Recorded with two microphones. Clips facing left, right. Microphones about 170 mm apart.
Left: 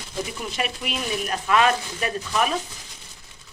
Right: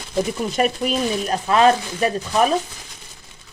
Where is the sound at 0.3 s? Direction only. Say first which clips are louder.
Right 9 dB; 40° right (ahead or behind).